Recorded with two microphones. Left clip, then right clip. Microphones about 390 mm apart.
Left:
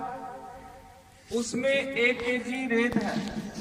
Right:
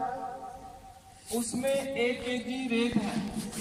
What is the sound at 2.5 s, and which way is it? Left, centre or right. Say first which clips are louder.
Speech: left 2 dB; centre.